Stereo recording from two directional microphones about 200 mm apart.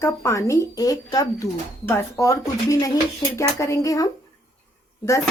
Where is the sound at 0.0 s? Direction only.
15° left (ahead or behind).